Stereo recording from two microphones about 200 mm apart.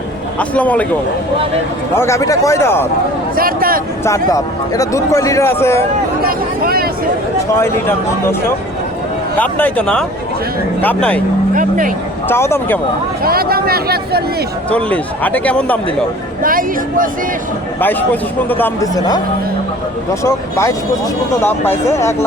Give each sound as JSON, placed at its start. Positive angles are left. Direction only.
{"t": 0.3, "sound": "a man's voice", "side_deg": 5}
{"t": 2.0, "sound": "a man's voice", "side_deg": 15}
{"t": 3.3, "sound": "speech", "side_deg": -45}
{"t": 4.0, "sound": "a man's voice", "side_deg": 15}
{"t": 6.2, "sound": "speech", "side_deg": -50}
{"t": 7.5, "sound": "a man's voice", "side_deg": 10}
{"t": 9.4, "sound": "a man's voice", "side_deg": 10}
{"t": 11.5, "sound": "speech", "side_deg": -45}
{"t": 12.3, "sound": "a man's voice", "side_deg": 10}
{"t": 13.2, "sound": "speech", "side_deg": -50}
{"t": 14.7, "sound": "a man's voice", "side_deg": 5}
{"t": 16.4, "sound": "speech", "side_deg": -45}
{"t": 17.7, "sound": "a man's voice", "side_deg": 10}
{"t": 20.2, "sound": "a man's voice", "side_deg": 15}